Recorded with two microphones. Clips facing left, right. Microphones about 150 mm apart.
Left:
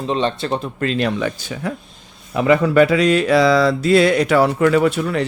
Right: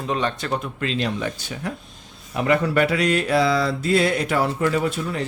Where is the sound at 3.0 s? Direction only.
90° left.